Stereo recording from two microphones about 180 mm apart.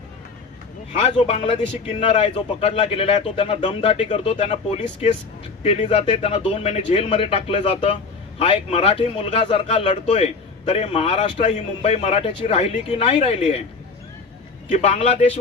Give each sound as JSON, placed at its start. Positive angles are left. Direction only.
{"t": 0.9, "sound": "a man's voice", "side_deg": 35}
{"t": 14.7, "sound": "a man's voice", "side_deg": 40}